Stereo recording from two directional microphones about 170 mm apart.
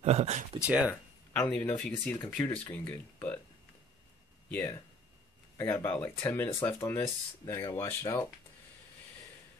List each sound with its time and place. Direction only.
0.0 s speech: 40° right (ahead or behind)
0.7 s speech: 10° right (ahead or behind)
1.3 s speech: 10° left (ahead or behind)
4.5 s speech: 10° left (ahead or behind)